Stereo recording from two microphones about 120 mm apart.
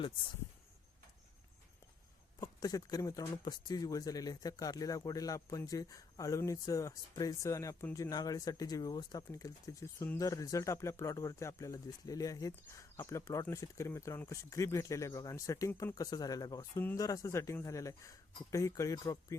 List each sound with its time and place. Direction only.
2.4 s speech: 30° left (ahead or behind)